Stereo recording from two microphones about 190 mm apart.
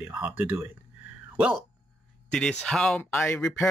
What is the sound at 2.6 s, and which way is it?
Speech, 5° left (ahead or behind).